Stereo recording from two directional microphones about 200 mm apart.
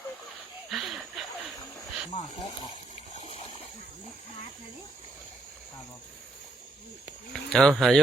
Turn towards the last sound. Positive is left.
turn(degrees=0)  # may be behind; listen again after turning